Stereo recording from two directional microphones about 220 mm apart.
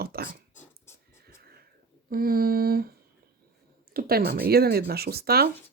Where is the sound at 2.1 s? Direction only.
40° right (ahead or behind).